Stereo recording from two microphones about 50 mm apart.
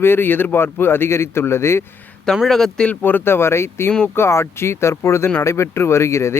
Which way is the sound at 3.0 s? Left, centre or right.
Left.